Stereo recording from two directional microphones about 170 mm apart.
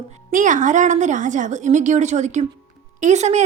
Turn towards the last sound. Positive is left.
turn(degrees=-40)  # may be behind; listen again after turning